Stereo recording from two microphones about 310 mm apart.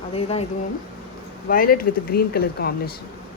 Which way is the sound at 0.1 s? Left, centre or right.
Centre.